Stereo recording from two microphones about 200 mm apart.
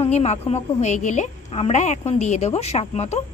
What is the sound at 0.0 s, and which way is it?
A woman's voice, 35° left (ahead or behind).